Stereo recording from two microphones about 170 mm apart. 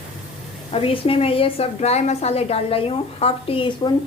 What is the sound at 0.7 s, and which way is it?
A woman's voice, 35° left (ahead or behind).